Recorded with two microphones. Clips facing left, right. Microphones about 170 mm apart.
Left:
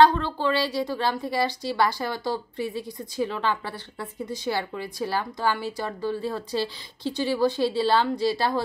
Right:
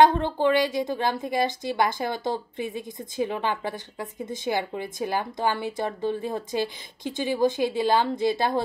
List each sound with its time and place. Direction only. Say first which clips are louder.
0.0 s a woman's voice: right 1 dB; 20° right (ahead or behind)